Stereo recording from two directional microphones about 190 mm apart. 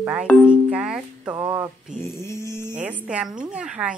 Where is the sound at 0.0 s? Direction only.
5° right (ahead or behind).